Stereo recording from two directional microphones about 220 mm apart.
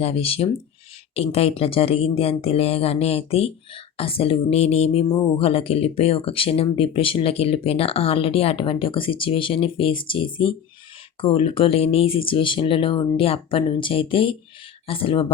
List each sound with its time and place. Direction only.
0.0 s speech: 25° left (ahead or behind)